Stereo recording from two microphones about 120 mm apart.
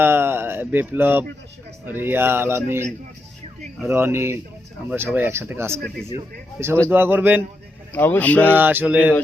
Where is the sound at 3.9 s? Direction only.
20° right (ahead or behind).